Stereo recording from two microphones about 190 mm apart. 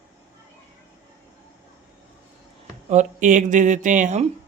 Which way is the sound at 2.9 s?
40° right (ahead or behind).